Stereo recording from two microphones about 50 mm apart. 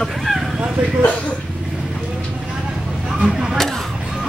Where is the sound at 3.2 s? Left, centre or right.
Centre.